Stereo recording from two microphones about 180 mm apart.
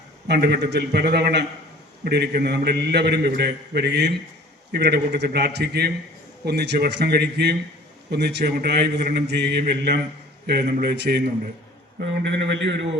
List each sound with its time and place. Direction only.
0.3 s a man's voice: 65° right (ahead or behind)